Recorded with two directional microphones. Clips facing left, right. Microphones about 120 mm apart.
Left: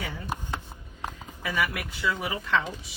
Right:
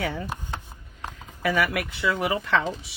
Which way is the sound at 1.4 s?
90° right.